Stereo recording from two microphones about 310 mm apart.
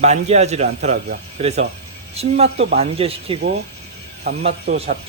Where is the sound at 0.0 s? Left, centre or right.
Right.